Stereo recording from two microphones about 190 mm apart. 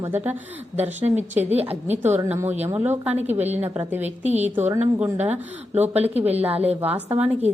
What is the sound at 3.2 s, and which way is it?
Speech, 35° right (ahead or behind).